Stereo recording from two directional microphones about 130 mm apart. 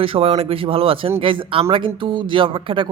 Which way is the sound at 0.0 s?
50° right (ahead or behind).